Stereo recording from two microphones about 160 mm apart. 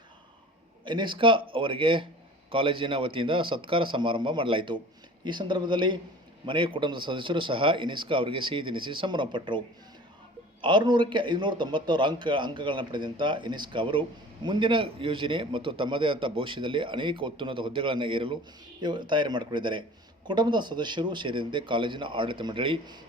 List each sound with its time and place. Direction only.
0.9 s a man's voice: 30° right (ahead or behind)